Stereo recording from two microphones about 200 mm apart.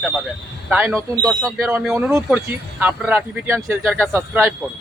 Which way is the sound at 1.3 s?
Centre (ahead or behind).